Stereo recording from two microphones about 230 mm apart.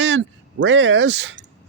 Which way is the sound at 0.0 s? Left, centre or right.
Right.